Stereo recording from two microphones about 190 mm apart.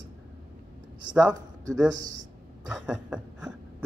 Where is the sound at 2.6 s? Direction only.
5° right (ahead or behind).